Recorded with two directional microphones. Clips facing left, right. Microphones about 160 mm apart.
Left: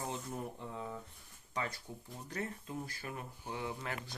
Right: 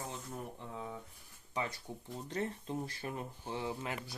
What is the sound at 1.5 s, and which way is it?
Speech, 20° right (ahead or behind).